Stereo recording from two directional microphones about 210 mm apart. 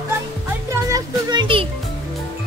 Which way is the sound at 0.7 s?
15° right (ahead or behind).